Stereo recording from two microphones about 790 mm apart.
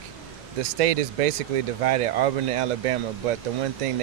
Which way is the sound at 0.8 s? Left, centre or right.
Right.